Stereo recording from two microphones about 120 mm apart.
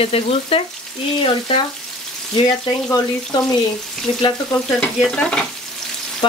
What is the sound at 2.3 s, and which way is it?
Speech, 40° left (ahead or behind).